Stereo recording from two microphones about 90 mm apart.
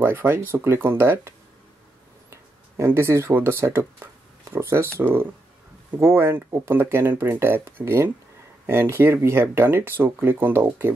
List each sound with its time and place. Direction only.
0.0 s speech: 25° right (ahead or behind)
2.8 s speech: 30° right (ahead or behind)